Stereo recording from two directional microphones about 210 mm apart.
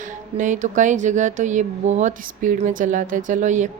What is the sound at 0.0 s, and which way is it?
Speech, 35° right (ahead or behind).